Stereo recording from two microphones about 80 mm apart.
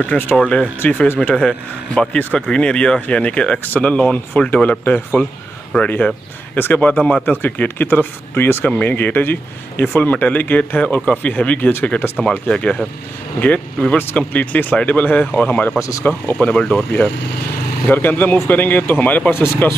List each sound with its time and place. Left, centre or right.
0.0 s speech: left
1.3 s speech: centre
15.8 s speech: left
16.3 s speech: left